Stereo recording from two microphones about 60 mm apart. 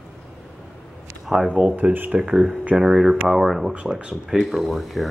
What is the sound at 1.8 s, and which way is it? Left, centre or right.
Speech, right.